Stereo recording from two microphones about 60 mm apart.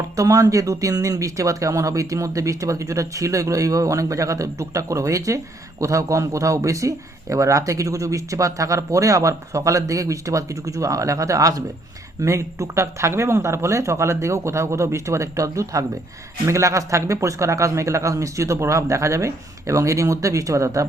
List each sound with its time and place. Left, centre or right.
0.2 s speech: right
12.2 s speech: right
16.5 s speech: right